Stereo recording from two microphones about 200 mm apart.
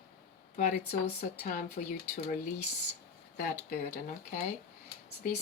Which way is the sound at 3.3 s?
45° left (ahead or behind).